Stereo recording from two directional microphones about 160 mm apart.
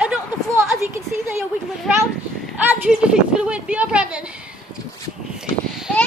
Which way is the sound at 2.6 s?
10° right (ahead or behind).